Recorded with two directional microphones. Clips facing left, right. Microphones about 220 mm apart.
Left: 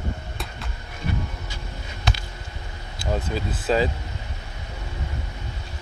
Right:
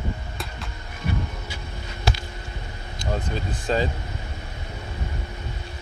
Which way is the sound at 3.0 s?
5° left (ahead or behind).